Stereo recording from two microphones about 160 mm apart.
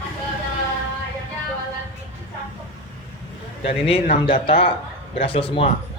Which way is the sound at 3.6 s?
40° left (ahead or behind).